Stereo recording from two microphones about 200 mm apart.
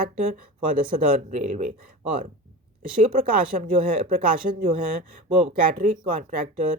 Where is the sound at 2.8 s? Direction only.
45° right (ahead or behind).